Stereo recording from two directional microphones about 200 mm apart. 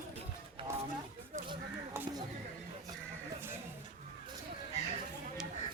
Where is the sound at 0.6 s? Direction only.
25° right (ahead or behind).